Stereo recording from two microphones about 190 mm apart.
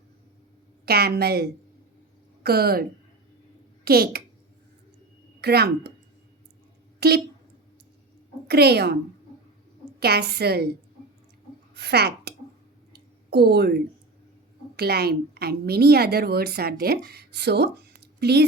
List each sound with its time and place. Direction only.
0.9 s a woman's voice: 55° right (ahead or behind)
3.8 s a child's voice: 55° right (ahead or behind)
5.4 s a woman's voice: 60° right (ahead or behind)
7.0 s a woman's voice: 60° right (ahead or behind)
8.4 s a woman's voice: 60° right (ahead or behind)
10.0 s a woman's voice: 55° right (ahead or behind)
12.9 s a sound: 60° right (ahead or behind)
14.8 s a woman's voice: 55° right (ahead or behind)